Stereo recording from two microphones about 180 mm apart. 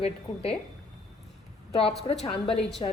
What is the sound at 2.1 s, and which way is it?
Speech, 30° left (ahead or behind).